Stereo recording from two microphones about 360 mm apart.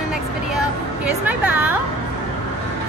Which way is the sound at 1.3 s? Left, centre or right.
Centre.